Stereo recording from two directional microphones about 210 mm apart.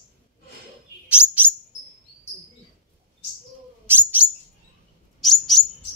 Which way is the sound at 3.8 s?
10° right (ahead or behind).